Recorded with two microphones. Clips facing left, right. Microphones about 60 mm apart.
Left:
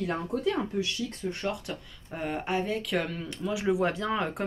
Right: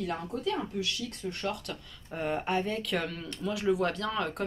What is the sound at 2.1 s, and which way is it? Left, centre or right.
Speech, centre.